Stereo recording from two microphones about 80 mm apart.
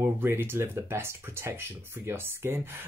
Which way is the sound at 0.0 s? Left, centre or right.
Right.